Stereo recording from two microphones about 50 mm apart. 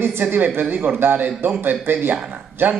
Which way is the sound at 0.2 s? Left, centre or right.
Right.